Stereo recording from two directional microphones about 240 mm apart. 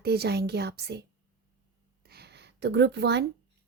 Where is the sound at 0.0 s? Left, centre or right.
Right.